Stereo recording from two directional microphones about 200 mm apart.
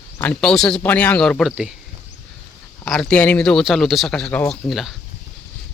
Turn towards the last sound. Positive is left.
turn(degrees=0)  # may be behind; listen again after turning